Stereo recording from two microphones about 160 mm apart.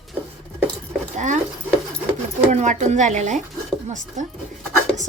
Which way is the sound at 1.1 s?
50° right (ahead or behind).